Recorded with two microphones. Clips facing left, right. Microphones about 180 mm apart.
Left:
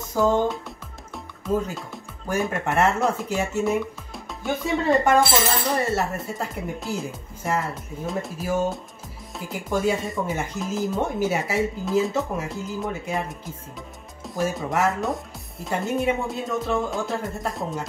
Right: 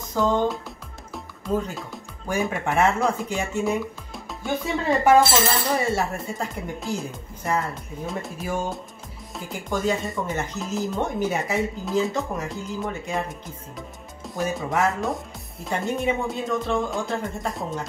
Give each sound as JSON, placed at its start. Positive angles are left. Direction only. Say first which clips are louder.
{"t": 0.1, "sound": "speech", "louder": "left 1 dB", "side_deg": 5}